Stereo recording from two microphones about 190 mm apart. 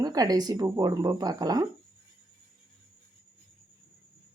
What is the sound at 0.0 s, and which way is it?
Speech, 20° right (ahead or behind).